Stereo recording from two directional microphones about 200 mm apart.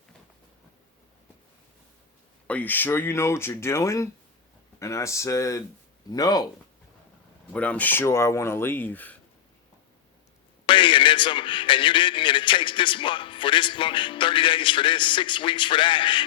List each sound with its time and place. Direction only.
2.5 s speech: 10° left (ahead or behind)
7.5 s speech: 5° left (ahead or behind)
10.7 s speech: 25° left (ahead or behind)